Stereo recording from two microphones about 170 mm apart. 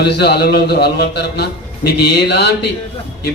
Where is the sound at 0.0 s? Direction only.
75° left (ahead or behind).